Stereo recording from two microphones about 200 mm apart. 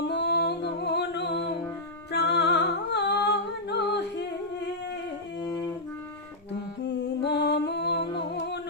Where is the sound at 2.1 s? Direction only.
55° left (ahead or behind).